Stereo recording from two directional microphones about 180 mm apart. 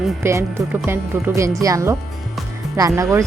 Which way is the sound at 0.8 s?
15° right (ahead or behind).